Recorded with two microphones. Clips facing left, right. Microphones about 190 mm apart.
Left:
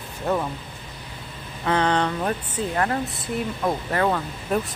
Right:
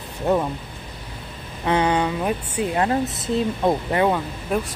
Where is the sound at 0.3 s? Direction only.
20° right (ahead or behind).